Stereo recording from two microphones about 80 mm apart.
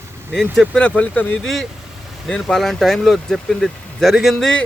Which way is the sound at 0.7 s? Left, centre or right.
Centre.